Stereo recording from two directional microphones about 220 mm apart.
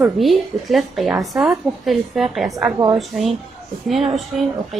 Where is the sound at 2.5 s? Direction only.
15° right (ahead or behind).